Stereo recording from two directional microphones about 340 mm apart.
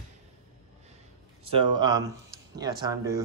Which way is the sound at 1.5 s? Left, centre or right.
Centre.